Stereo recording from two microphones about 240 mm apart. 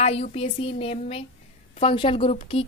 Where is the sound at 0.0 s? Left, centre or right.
Left.